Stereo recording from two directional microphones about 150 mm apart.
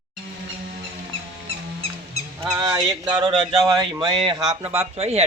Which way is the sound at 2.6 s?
25° right (ahead or behind).